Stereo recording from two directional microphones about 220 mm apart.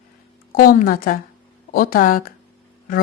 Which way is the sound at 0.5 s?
40° left (ahead or behind).